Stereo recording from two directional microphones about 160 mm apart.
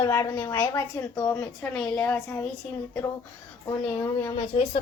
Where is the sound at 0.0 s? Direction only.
20° left (ahead or behind).